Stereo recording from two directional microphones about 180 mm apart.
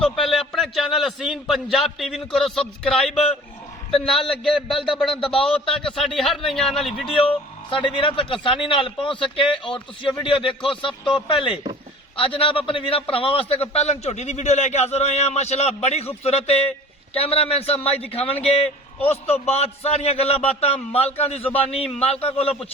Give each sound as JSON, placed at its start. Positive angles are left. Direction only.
{"t": 0.0, "sound": "a man's voice", "side_deg": 0}
{"t": 5.2, "sound": "speech", "side_deg": 30}
{"t": 5.5, "sound": "a man's voice", "side_deg": 5}
{"t": 7.7, "sound": "speech", "side_deg": 30}
{"t": 12.1, "sound": "a man's voice", "side_deg": 30}